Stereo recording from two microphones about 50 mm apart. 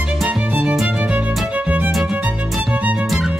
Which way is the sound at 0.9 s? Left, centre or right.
Right.